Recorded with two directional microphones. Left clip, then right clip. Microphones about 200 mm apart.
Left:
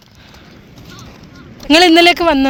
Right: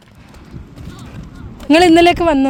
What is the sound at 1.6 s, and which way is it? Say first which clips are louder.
Speech: left 1 dB; 10° right (ahead or behind).